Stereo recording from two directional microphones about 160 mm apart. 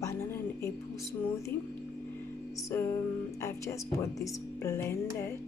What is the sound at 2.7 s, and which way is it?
Music, 15° left (ahead or behind).